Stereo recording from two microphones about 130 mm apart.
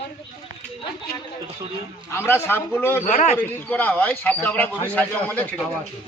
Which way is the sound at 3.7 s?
15° left (ahead or behind).